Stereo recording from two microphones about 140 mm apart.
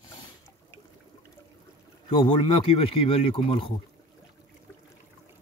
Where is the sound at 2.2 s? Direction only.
40° left (ahead or behind).